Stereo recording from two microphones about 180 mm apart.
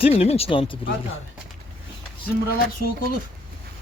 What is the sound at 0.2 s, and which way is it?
Speech, 35° left (ahead or behind).